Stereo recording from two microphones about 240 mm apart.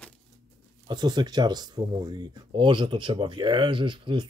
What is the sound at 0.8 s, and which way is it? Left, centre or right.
Speech, centre.